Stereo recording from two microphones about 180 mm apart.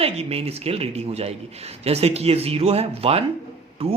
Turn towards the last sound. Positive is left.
turn(degrees=-30)  # may be behind; listen again after turning